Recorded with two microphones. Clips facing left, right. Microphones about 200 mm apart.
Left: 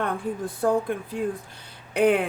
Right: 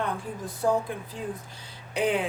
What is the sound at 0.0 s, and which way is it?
Speech, 55° left (ahead or behind).